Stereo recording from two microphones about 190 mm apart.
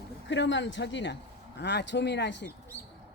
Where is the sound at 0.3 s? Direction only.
70° left (ahead or behind).